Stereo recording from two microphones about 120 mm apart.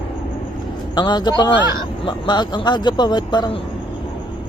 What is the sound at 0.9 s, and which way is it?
Speech, 35° left (ahead or behind).